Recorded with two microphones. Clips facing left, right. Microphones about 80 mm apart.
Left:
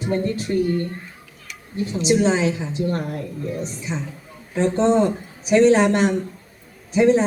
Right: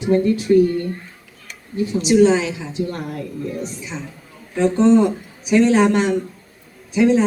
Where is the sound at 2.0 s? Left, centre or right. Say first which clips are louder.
Right 4 dB; left.